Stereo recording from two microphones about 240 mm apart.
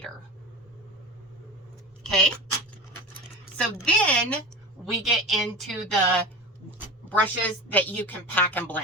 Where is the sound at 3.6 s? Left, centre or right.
Centre.